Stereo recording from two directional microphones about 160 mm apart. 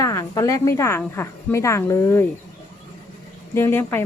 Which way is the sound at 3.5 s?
15° left (ahead or behind).